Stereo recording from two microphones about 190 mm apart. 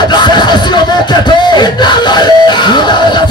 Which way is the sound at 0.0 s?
20° left (ahead or behind).